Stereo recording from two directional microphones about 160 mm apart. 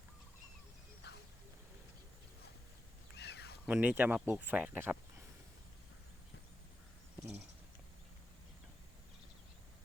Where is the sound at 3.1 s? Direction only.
90° left.